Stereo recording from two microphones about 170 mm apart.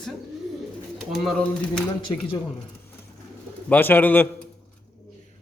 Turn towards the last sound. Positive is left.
turn(degrees=10)  # may be behind; listen again after turning